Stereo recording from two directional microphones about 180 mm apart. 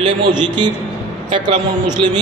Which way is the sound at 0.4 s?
25° right (ahead or behind).